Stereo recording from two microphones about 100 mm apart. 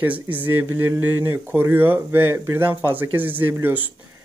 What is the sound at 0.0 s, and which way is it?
Speech, 20° right (ahead or behind).